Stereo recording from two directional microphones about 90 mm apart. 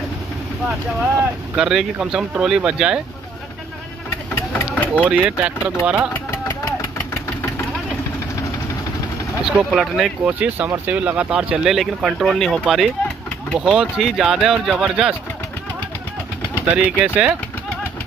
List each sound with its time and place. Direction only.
1.6 s speech: 5° right (ahead or behind)
4.6 s vehicle: 20° left (ahead or behind)
5.0 s speech: 15° right (ahead or behind)
9.4 s speech: 5° right (ahead or behind)
10.2 s speech: 15° right (ahead or behind)
16.7 s speech: 15° right (ahead or behind)